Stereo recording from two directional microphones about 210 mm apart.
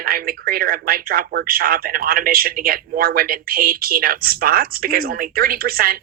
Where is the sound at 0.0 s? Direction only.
45° right (ahead or behind).